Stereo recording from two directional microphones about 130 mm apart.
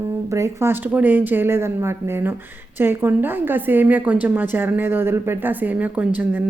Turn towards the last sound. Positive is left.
turn(degrees=-10)  # may be behind; listen again after turning